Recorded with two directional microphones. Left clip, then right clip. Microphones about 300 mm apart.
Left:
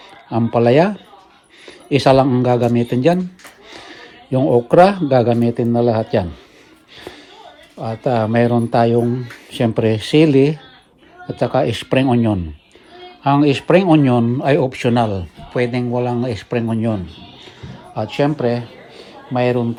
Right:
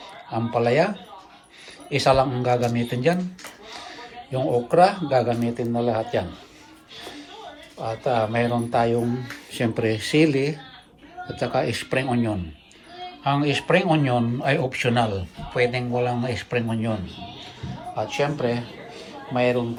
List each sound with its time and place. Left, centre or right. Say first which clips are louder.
0.3 s speech: left 7 dB; left
3.7 s a sound: left 2 dB; left
4.7 s speech: left 6 dB; left
7.8 s a man's voice: left 4 dB; left